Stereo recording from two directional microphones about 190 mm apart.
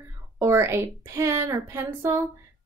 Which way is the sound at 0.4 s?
15° right (ahead or behind).